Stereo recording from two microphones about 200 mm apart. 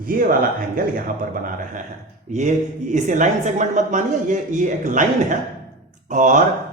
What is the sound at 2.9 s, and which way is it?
Speech, 40° right (ahead or behind).